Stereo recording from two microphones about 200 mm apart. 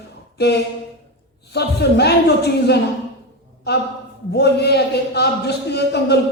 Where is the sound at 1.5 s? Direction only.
55° left (ahead or behind).